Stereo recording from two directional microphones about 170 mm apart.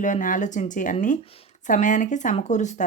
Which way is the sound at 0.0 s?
50° left (ahead or behind).